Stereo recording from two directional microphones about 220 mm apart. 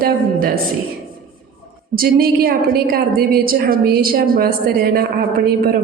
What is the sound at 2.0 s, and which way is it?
A woman's voice, 40° right (ahead or behind).